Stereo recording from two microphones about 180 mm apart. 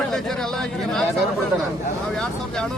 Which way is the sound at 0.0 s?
5° left (ahead or behind).